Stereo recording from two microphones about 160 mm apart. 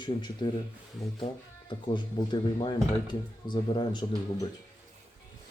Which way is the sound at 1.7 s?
30° left (ahead or behind).